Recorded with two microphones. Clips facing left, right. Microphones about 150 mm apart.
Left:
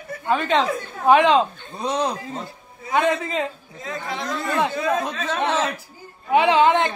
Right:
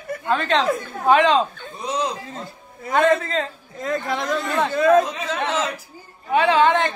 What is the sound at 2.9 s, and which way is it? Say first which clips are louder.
Speech: right 3 dB; 10° left (ahead or behind).